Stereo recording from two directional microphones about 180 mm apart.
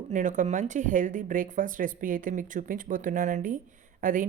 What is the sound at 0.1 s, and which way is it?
Speech, 45° right (ahead or behind).